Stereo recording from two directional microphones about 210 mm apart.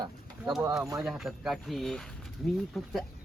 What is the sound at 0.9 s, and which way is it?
Speech, centre (ahead or behind).